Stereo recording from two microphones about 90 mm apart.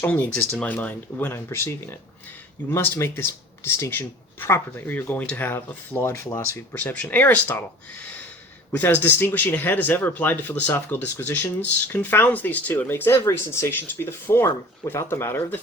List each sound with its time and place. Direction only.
0.0 s speech: 20° left (ahead or behind)
1.3 s speech: 30° left (ahead or behind)
8.7 s speech: 20° left (ahead or behind)